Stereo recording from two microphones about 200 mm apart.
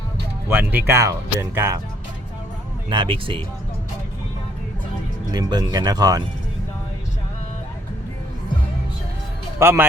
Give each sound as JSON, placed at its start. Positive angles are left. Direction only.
{"t": 0.4, "sound": "speech", "side_deg": -10}
{"t": 2.9, "sound": "speech", "side_deg": -25}
{"t": 5.3, "sound": "speech", "side_deg": -20}
{"t": 9.6, "sound": "a man's voice", "side_deg": -10}